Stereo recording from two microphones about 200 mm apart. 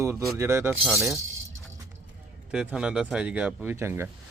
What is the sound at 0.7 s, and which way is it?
Speech, centre (ahead or behind).